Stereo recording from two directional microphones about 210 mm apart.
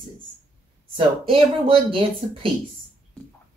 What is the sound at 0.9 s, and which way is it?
Speech, 25° right (ahead or behind).